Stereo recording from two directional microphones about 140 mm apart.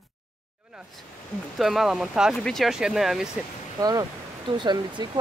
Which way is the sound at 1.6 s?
Centre (ahead or behind).